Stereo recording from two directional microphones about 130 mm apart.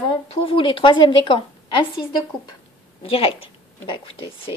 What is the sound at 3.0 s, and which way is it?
A woman's voice, 45° left (ahead or behind).